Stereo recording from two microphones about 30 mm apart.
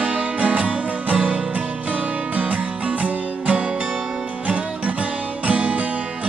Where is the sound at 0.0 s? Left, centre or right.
Right.